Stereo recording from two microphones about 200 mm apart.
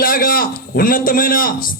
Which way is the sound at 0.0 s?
45° left (ahead or behind).